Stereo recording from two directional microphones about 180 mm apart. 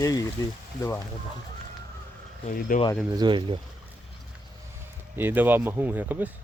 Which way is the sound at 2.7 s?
50° left (ahead or behind).